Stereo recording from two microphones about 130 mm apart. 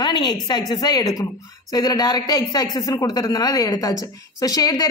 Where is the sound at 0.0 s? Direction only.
30° left (ahead or behind).